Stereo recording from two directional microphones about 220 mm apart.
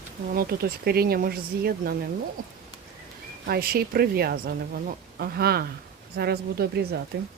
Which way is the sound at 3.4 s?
45° right (ahead or behind).